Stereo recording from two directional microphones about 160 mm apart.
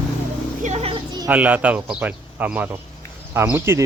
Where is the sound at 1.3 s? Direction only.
10° right (ahead or behind).